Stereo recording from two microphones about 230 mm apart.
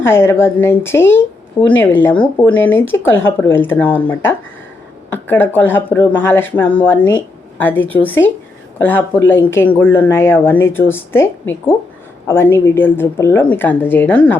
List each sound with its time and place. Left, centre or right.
0.0 s speech: centre